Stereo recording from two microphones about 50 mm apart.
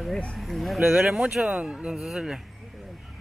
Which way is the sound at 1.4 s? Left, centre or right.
Right.